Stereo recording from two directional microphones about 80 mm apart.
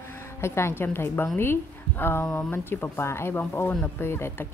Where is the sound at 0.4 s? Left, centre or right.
Left.